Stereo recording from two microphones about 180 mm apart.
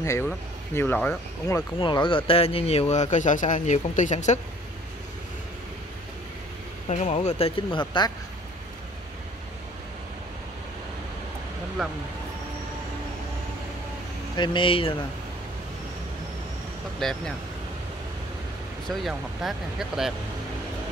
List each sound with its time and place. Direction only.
0.0 s speech: 15° left (ahead or behind)
1.8 s speech: 25° left (ahead or behind); by 4.4 s 40° left (ahead or behind)
6.9 s speech: 40° left (ahead or behind)
11.8 s speech: centre (ahead or behind)
14.3 s speech: 25° left (ahead or behind)
17.0 s speech: centre (ahead or behind)
18.9 s speech: centre (ahead or behind)